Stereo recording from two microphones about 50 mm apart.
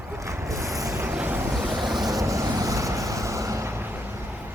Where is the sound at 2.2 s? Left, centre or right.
Right.